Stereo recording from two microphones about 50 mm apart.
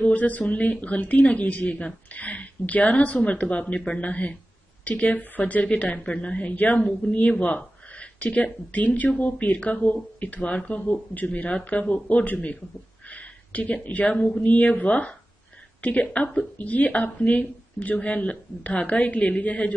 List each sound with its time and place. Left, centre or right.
0.0 s speech: left
13.1 s a sound: left
13.8 s speech: left